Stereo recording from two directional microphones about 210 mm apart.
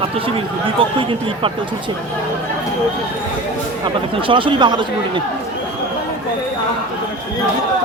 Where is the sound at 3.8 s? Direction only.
25° right (ahead or behind).